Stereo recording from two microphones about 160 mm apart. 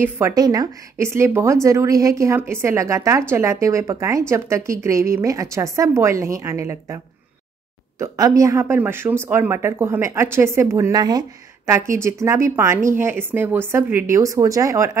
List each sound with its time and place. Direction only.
0.0 s speech: 20° right (ahead or behind)
8.0 s speech: 20° right (ahead or behind)